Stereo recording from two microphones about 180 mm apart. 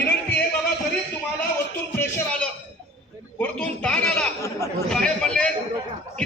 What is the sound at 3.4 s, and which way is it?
A man's voice, 5° left (ahead or behind).